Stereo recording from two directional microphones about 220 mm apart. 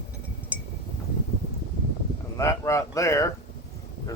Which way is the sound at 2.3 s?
15° left (ahead or behind).